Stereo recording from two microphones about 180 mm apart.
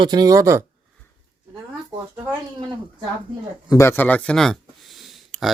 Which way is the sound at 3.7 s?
15° left (ahead or behind).